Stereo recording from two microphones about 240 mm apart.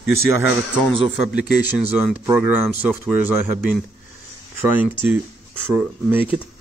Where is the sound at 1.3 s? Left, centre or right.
Centre.